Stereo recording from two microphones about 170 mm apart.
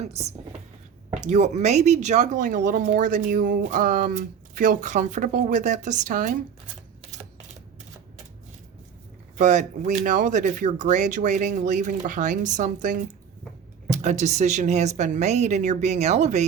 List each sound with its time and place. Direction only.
0.0 s speech: 40° right (ahead or behind)
9.4 s speech: 45° right (ahead or behind)